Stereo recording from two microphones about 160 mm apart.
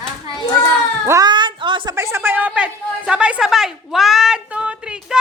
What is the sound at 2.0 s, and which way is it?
A woman's voice, 15° right (ahead or behind).